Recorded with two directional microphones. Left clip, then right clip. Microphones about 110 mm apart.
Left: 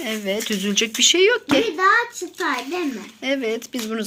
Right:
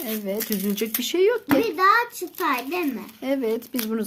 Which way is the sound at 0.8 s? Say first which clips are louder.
Left 7 dB; 20° right (ahead or behind).